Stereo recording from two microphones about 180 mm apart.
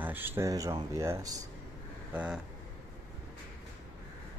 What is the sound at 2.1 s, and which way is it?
Speech, 5° right (ahead or behind).